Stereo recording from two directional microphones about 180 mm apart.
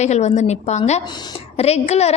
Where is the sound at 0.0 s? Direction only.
40° left (ahead or behind).